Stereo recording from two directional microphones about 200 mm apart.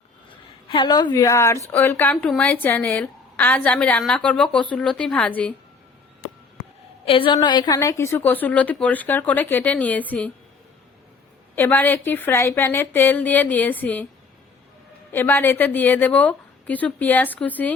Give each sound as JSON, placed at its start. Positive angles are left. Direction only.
{"t": 0.7, "sound": "a woman's voice", "side_deg": 20}
{"t": 7.0, "sound": "a woman's voice", "side_deg": 25}
{"t": 11.5, "sound": "a woman's voice", "side_deg": 10}
{"t": 15.1, "sound": "a woman's voice", "side_deg": 10}